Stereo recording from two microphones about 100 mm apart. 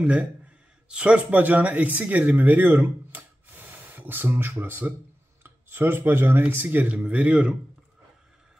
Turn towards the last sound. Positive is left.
turn(degrees=-15)  # may be behind; listen again after turning